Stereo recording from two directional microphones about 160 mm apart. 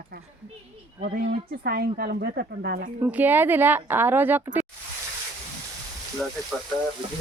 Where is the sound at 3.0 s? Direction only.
10° right (ahead or behind).